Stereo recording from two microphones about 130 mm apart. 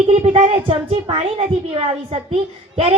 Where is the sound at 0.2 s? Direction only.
55° right (ahead or behind).